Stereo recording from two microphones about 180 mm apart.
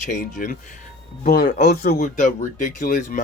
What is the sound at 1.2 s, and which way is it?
Speech, 55° left (ahead or behind).